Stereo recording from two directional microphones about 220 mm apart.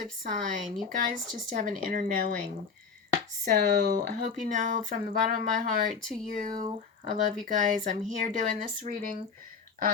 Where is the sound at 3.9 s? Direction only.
40° right (ahead or behind).